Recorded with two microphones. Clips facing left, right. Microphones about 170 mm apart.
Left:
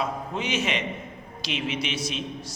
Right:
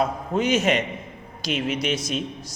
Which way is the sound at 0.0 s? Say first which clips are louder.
Right 6 dB; 40° right (ahead or behind).